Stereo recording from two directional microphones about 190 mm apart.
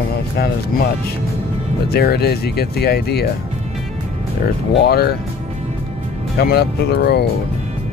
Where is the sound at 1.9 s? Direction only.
55° left (ahead or behind).